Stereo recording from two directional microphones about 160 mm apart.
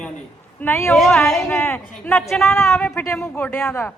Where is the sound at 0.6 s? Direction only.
15° left (ahead or behind).